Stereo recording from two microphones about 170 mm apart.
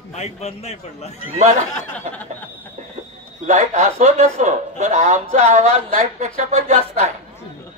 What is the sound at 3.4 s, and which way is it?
A man's voice, 45° right (ahead or behind).